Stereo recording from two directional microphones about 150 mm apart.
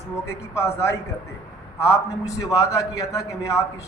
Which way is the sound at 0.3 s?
20° left (ahead or behind).